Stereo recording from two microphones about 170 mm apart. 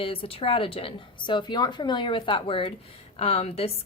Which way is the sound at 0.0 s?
30° left (ahead or behind).